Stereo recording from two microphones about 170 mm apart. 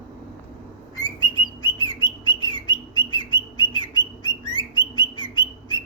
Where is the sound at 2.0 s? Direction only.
30° left (ahead or behind).